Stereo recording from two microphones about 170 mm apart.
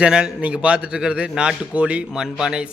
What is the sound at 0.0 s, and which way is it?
A man's voice, 5° right (ahead or behind).